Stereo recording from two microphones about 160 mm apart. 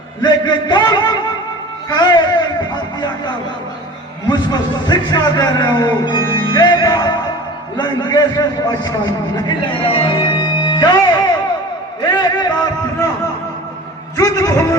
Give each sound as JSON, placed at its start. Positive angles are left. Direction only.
{"t": 0.2, "sound": "a man's voice", "side_deg": 30}
{"t": 4.3, "sound": "a man's voice", "side_deg": 25}
{"t": 12.0, "sound": "a sound", "side_deg": 25}
{"t": 14.2, "sound": "a man's voice", "side_deg": 20}